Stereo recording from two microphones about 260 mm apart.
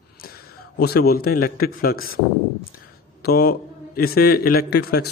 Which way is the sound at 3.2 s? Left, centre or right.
Left.